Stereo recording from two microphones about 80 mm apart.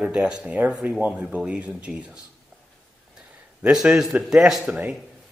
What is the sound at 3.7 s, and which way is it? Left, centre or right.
A man's voice, centre.